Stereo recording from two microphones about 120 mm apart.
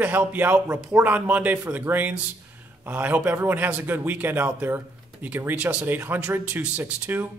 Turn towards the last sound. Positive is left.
turn(degrees=-15)  # may be behind; listen again after turning